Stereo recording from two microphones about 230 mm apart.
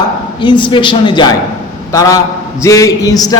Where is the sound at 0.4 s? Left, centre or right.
Left.